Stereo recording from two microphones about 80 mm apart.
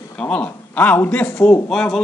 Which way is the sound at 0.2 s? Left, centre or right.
Centre.